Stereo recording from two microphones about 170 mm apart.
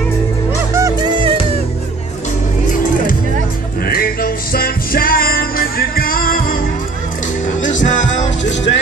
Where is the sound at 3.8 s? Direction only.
60° left (ahead or behind).